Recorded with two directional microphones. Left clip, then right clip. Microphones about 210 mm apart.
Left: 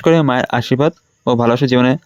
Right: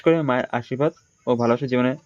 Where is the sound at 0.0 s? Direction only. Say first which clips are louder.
Left 6 dB; 45° left (ahead or behind).